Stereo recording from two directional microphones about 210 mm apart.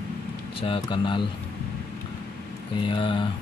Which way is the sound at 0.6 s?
25° left (ahead or behind).